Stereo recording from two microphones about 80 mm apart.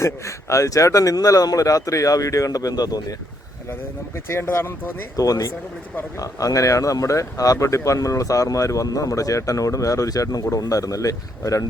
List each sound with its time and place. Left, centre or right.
0.0 s speech: left
3.7 s speech: left
5.1 s speech: left